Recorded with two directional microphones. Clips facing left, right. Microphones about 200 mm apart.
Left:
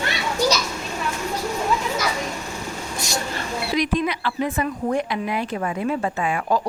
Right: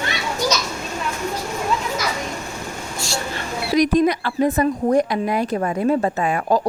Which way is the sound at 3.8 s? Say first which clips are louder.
Right 7 dB; 40° right (ahead or behind).